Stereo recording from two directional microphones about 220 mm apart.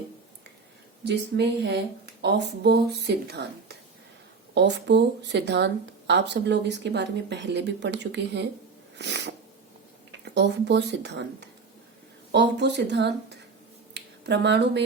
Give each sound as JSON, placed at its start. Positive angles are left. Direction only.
{"t": 1.0, "sound": "speech", "side_deg": -50}
{"t": 9.0, "sound": "sneeze", "side_deg": -50}
{"t": 10.1, "sound": "speech", "side_deg": -50}
{"t": 13.9, "sound": "a sound", "side_deg": -50}